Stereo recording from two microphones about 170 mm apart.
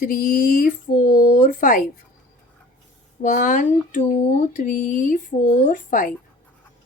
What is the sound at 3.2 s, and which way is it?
Speech, 50° left (ahead or behind).